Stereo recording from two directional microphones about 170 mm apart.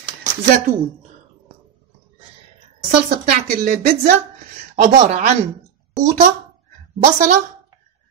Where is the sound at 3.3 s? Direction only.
50° right (ahead or behind).